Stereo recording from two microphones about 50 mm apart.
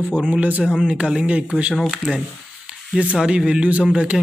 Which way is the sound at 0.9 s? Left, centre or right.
Centre.